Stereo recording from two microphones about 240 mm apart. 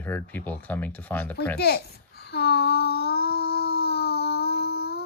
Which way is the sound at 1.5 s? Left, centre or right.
Left.